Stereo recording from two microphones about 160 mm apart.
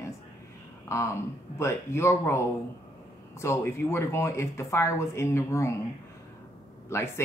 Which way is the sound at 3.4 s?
15° left (ahead or behind).